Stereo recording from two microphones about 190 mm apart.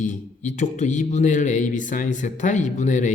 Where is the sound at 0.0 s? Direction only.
40° left (ahead or behind).